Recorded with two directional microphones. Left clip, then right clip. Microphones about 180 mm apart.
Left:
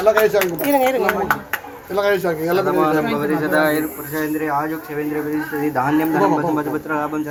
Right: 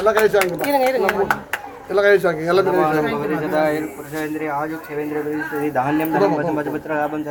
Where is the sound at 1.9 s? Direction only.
35° right (ahead or behind).